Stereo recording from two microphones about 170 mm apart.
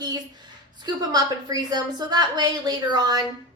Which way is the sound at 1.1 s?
25° right (ahead or behind).